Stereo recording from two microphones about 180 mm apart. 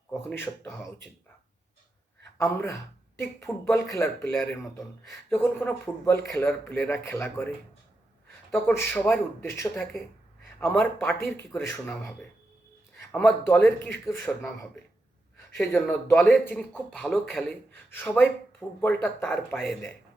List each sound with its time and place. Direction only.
0.1 s speech: 10° left (ahead or behind)
2.4 s a man's voice: 15° left (ahead or behind)
15.5 s a man's voice: 5° left (ahead or behind)